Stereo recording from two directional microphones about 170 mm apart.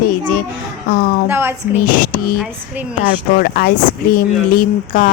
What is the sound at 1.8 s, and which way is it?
Speech, 55° left (ahead or behind).